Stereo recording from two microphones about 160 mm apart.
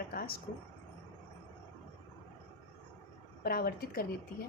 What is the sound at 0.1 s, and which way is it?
Speech, 70° left (ahead or behind).